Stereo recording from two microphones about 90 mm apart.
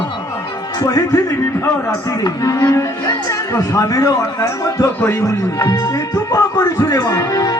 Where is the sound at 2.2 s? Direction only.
35° left (ahead or behind).